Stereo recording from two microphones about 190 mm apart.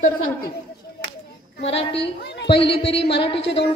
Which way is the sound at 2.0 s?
65° left (ahead or behind).